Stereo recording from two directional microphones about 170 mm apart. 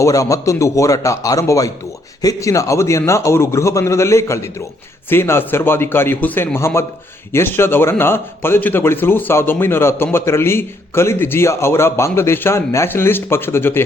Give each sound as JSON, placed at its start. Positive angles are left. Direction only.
{"t": 0.0, "sound": "a man's voice", "side_deg": 20}